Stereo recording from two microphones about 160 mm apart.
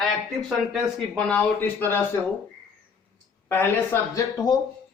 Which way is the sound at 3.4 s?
15° left (ahead or behind).